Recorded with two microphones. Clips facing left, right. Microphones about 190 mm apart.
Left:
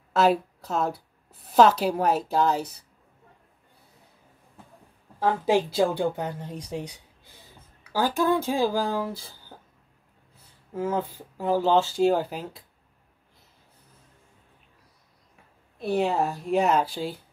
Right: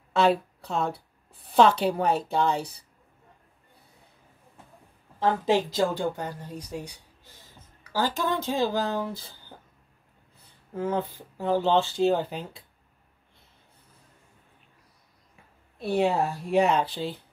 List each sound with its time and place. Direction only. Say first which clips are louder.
0.1 s a woman's voice: left 1 dB; 5° left (ahead or behind)
5.2 s speech: left 1 dB; 10° left (ahead or behind)
10.7 s speech: left 1 dB; 5° left (ahead or behind)
15.9 s speech: even; centre (ahead or behind)